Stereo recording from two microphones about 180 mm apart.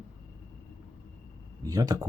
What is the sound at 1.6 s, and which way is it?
Speech, 20° right (ahead or behind).